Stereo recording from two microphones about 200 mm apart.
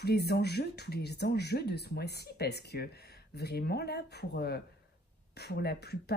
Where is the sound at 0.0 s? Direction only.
55° left (ahead or behind).